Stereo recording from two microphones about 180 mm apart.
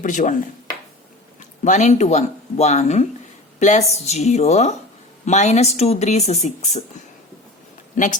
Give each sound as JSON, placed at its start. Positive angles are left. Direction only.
{"t": 0.0, "sound": "speech", "side_deg": 45}
{"t": 1.4, "sound": "speech", "side_deg": 45}